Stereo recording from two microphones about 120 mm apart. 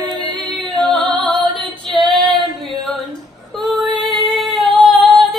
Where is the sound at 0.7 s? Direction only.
5° left (ahead or behind).